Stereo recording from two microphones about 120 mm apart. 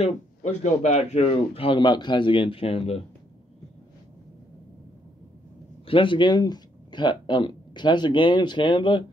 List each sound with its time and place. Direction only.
0.0 s speech: 75° left (ahead or behind); by 3.0 s 50° left (ahead or behind)
5.9 s speech: 45° left (ahead or behind)